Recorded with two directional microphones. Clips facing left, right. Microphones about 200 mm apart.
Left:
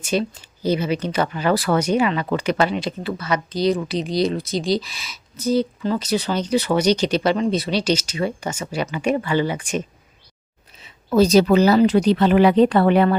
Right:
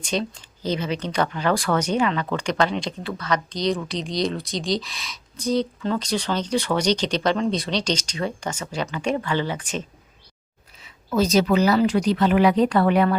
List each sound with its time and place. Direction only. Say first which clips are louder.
0.0 s a woman's voice: left 4 dB; 5° left (ahead or behind)
10.8 s speech: left 6 dB; 30° left (ahead or behind)